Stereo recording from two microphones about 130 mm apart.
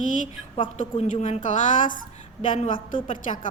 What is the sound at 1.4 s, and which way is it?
A woman's voice, 85° left.